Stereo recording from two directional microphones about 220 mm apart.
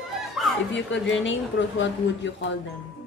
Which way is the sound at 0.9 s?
60° left (ahead or behind).